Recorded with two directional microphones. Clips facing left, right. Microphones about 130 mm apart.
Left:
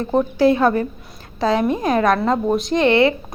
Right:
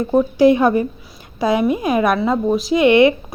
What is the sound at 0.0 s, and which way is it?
Speech, 5° right (ahead or behind).